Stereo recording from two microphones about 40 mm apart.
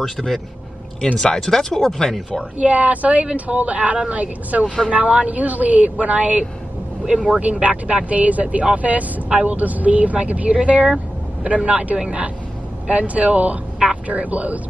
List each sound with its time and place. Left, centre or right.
0.0 s speech: centre
2.6 s speech: right
4.6 s speech: left
4.9 s speech: right